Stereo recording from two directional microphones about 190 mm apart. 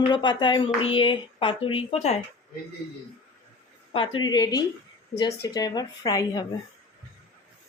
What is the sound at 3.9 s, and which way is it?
Speech, 25° left (ahead or behind).